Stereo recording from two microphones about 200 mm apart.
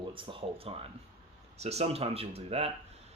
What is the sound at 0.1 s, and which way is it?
Speech, 25° right (ahead or behind).